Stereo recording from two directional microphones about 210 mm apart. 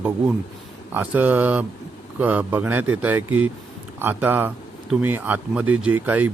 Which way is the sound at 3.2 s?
85° right.